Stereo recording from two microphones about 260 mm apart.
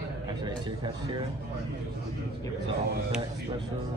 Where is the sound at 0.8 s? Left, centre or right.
Centre.